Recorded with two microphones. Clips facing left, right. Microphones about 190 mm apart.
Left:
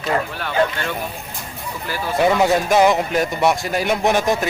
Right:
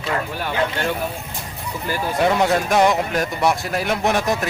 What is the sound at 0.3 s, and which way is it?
Speech, 10° right (ahead or behind).